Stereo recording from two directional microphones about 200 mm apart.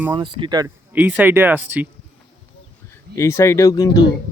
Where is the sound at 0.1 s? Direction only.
25° right (ahead or behind).